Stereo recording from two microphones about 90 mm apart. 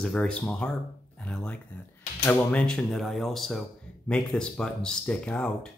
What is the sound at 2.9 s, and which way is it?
Speech, centre (ahead or behind).